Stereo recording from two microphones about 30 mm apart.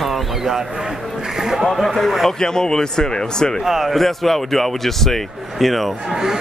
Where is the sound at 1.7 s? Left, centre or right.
Centre.